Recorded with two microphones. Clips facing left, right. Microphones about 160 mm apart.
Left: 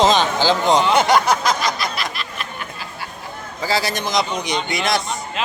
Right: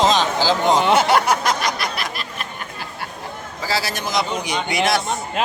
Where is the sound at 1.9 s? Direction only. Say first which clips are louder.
Left 1 dB; 45° right (ahead or behind).